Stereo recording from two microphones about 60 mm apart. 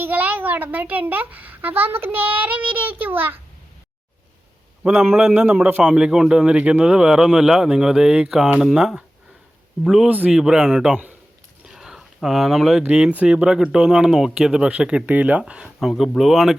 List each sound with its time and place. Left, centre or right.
0.0 s a child's voice: right
4.9 s a child's voice: right
5.9 s speech: centre
10.1 s speech: right
10.3 s speech: centre
11.6 s a sound: centre
13.1 s speech: right
15.6 s speech: centre